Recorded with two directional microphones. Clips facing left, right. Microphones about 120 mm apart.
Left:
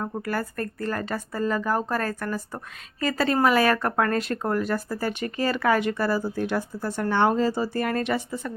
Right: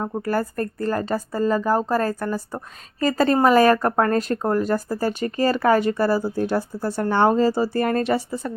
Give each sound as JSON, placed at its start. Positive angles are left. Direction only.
{"t": 0.0, "sound": "speech", "side_deg": -35}